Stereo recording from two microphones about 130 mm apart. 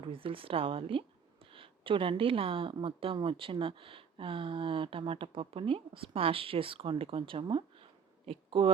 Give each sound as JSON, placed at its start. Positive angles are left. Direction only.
{"t": 0.0, "sound": "speech", "side_deg": -45}